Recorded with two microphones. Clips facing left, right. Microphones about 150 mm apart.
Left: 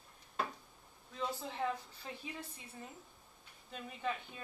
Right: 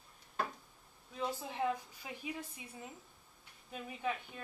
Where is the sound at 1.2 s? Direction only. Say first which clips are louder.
Right 2 dB; 10° right (ahead or behind).